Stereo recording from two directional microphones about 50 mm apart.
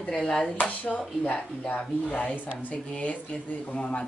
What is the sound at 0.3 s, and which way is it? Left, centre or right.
Speech, centre.